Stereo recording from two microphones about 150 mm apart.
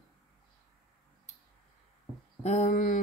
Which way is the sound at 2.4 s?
50° left (ahead or behind).